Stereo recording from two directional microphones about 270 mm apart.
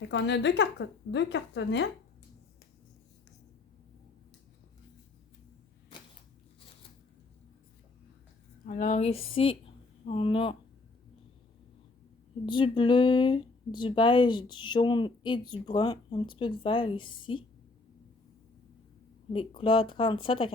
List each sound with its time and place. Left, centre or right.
0.1 s a woman's voice: left
8.6 s speech: left
12.5 s speech: centre
19.3 s speech: centre